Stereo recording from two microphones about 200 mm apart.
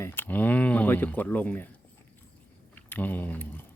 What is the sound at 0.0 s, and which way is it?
Speech, 10° left (ahead or behind).